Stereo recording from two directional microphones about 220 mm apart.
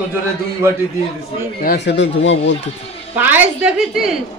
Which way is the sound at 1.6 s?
50° left (ahead or behind).